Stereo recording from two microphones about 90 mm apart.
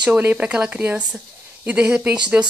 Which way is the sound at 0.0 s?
20° right (ahead or behind).